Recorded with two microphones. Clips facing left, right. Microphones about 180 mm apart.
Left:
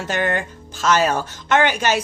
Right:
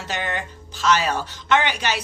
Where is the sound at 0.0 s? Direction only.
50° left (ahead or behind).